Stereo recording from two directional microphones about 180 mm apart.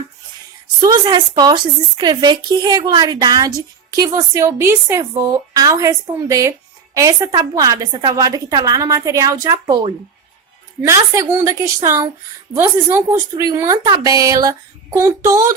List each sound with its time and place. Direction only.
0.8 s a woman's voice: 20° right (ahead or behind)
10.8 s a woman's voice: 15° right (ahead or behind)